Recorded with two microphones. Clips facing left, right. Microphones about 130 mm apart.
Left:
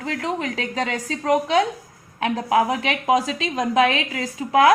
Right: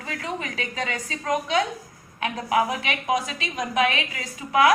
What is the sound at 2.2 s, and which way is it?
A woman's voice, 90° left.